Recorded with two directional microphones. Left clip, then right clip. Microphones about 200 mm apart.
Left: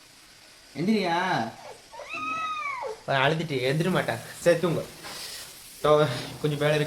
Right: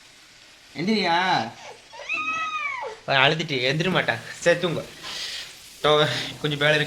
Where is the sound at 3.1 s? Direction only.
10° right (ahead or behind).